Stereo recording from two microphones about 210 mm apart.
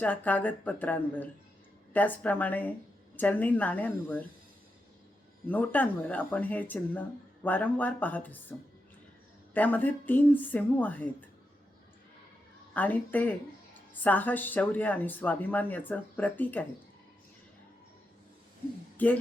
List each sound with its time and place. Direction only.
0.0 s speech: 5° left (ahead or behind)
5.5 s speech: 10° left (ahead or behind)
9.6 s speech: 10° left (ahead or behind)
12.7 s speech: 10° left (ahead or behind)
19.0 s speech: 10° left (ahead or behind)